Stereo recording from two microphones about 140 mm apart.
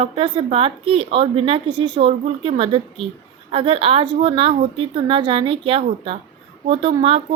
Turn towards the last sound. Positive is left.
turn(degrees=-40)  # may be behind; listen again after turning